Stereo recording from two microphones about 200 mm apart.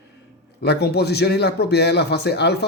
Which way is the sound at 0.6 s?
55° left (ahead or behind).